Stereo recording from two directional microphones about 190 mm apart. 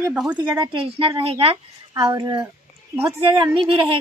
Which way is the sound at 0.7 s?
25° right (ahead or behind).